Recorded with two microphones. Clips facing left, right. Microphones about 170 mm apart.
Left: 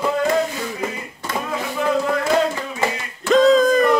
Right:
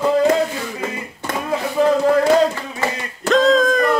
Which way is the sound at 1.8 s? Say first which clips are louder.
Right 6 dB; 35° right (ahead or behind).